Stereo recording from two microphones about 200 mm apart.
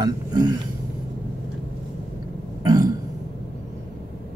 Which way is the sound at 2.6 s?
20° right (ahead or behind).